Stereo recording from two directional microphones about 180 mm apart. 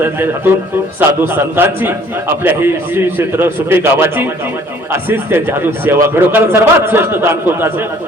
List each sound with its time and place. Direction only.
0.0 s a man's voice: 10° right (ahead or behind)